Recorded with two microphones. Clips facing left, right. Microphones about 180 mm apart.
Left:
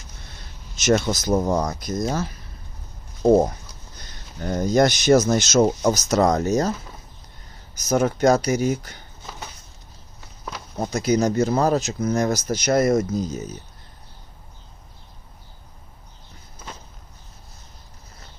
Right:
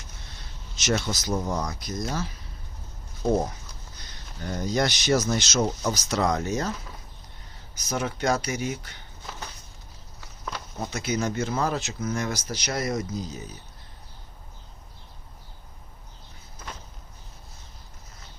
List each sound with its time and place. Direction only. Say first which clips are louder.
0.8 s speech: left 7 dB; 50° left (ahead or behind)
4.4 s speech: left 8 dB; 45° left (ahead or behind)
7.8 s speech: left 9 dB; 45° left (ahead or behind)
10.8 s speech: left 8 dB; 40° left (ahead or behind)